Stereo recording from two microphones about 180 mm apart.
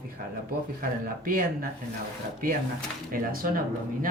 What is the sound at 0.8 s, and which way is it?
Speech, 50° right (ahead or behind).